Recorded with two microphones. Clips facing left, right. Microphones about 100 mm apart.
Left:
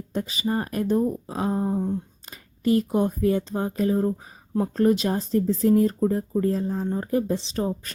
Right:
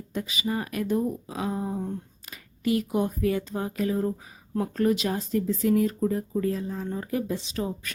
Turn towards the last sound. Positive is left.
turn(degrees=35)  # may be behind; listen again after turning